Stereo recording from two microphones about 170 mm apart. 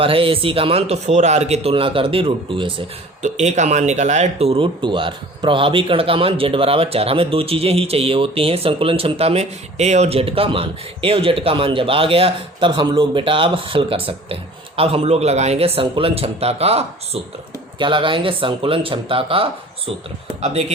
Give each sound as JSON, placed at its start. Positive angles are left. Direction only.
{"t": 0.0, "sound": "speech", "side_deg": -35}
{"t": 3.2, "sound": "speech", "side_deg": -45}